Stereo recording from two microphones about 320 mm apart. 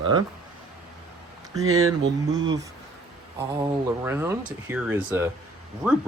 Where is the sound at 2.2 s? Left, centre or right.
Centre.